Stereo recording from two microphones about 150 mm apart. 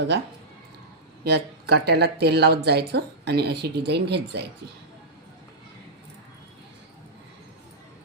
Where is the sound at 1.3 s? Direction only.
90° right.